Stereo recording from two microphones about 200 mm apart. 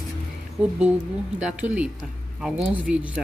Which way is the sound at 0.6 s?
5° right (ahead or behind).